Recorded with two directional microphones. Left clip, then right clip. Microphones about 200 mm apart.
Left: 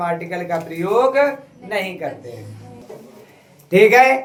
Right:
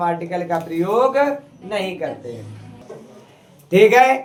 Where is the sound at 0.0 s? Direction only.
25° left (ahead or behind).